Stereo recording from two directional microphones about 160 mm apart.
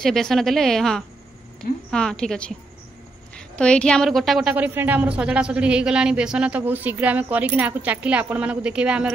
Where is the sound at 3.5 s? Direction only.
5° left (ahead or behind).